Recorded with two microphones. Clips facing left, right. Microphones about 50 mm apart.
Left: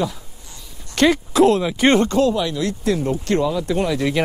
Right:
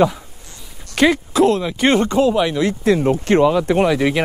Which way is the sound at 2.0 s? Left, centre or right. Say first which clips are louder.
Right 2 dB; centre.